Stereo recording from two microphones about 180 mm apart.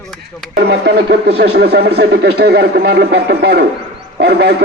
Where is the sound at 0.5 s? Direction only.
65° right (ahead or behind).